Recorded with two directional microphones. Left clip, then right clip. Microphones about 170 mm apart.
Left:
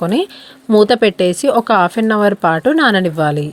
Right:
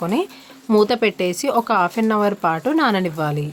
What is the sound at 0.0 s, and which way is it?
Speech, 30° left (ahead or behind).